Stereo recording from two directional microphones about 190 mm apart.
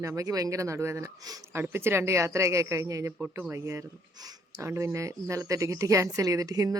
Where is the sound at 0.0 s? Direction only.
15° right (ahead or behind).